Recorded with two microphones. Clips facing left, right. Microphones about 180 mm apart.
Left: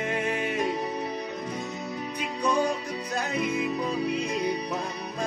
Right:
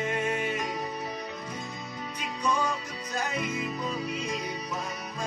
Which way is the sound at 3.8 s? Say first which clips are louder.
Left 5 dB; 60° left (ahead or behind).